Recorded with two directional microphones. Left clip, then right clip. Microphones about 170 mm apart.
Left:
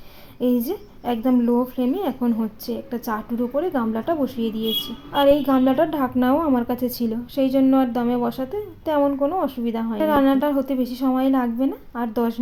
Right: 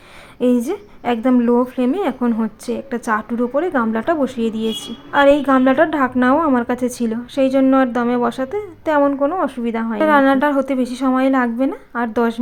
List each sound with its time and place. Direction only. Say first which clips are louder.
0.3 s a woman's voice: right 5 dB; 25° right (ahead or behind)